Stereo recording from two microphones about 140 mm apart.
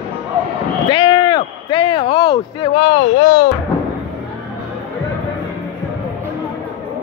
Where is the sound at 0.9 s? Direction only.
35° left (ahead or behind).